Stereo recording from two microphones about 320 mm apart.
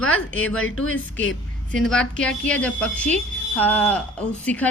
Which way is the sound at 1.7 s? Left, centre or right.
Centre.